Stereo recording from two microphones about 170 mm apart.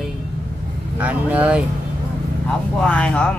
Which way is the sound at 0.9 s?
10° right (ahead or behind).